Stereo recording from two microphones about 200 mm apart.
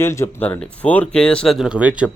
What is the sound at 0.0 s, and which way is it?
Speech, 15° left (ahead or behind).